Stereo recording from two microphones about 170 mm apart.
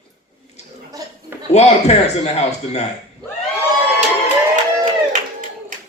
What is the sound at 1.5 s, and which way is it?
A man's voice, 40° left (ahead or behind).